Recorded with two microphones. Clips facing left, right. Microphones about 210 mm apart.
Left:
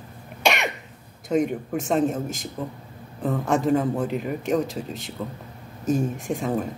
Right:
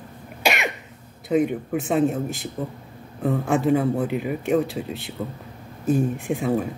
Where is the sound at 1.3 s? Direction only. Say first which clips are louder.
Right 2 dB; 5° right (ahead or behind).